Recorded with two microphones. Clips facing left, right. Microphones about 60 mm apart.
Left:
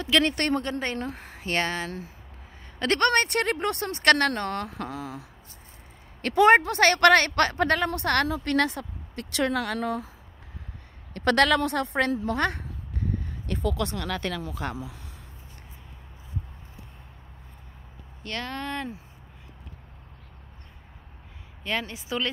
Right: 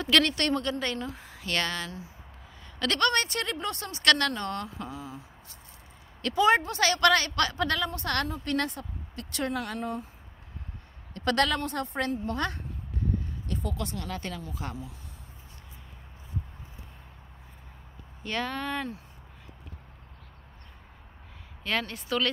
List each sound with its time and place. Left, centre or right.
0.3 s a woman's voice: left
1.0 s speech: left
1.4 s speech: left
2.8 s speech: left
4.3 s a woman's voice: left
6.2 s speech: left
7.8 s a woman's voice: left
11.1 s a woman's voice: left
13.5 s speech: left
18.2 s speech: centre
21.6 s speech: centre